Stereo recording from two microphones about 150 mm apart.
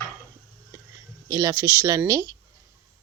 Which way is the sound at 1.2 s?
25° right (ahead or behind).